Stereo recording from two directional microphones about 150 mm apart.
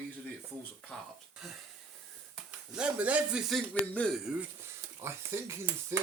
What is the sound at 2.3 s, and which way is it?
Speech, 5° right (ahead or behind).